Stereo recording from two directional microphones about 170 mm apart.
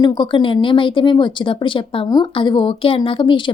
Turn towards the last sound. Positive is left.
turn(degrees=30)  # may be behind; listen again after turning